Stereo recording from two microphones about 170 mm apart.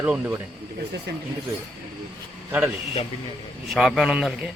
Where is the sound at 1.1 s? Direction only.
80° right.